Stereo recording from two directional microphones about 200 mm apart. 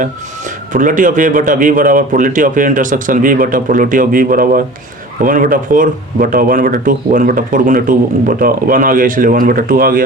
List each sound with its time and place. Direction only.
0.7 s a man's voice: 40° right (ahead or behind)